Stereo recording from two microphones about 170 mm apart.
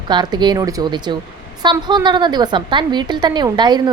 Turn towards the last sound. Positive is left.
turn(degrees=-25)  # may be behind; listen again after turning